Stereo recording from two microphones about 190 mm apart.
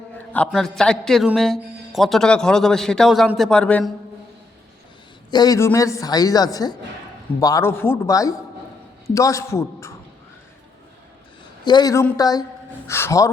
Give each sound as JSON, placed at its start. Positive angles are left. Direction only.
{"t": 0.3, "sound": "a man's voice", "side_deg": 5}
{"t": 5.3, "sound": "a woman's voice", "side_deg": 20}
{"t": 11.6, "sound": "a woman's voice", "side_deg": 20}